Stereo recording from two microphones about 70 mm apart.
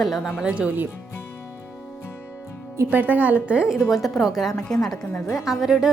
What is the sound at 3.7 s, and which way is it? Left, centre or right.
A woman's voice, centre.